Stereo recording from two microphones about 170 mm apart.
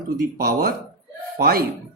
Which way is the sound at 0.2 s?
60° right (ahead or behind).